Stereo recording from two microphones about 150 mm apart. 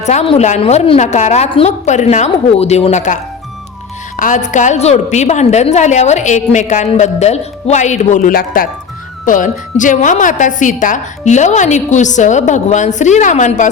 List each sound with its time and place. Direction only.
0.0 s a woman's voice: 50° left (ahead or behind)
4.2 s a woman's voice: 55° left (ahead or behind)
9.2 s a woman's voice: 60° left (ahead or behind)